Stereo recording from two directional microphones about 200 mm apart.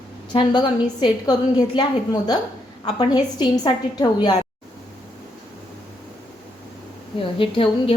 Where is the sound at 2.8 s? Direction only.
20° left (ahead or behind).